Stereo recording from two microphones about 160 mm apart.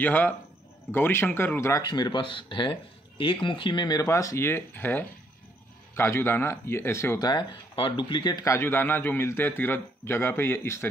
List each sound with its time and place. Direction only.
0.0 s speech: 10° left (ahead or behind)